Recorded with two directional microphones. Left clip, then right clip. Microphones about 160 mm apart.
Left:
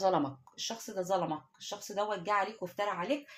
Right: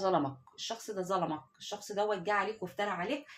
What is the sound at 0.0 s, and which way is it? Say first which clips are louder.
Speech: left 1 dB; 40° left (ahead or behind).